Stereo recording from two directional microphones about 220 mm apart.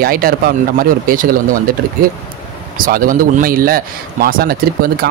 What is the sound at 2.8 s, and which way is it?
A man's voice, 40° right (ahead or behind).